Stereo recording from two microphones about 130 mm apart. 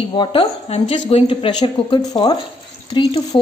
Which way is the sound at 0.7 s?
55° left (ahead or behind).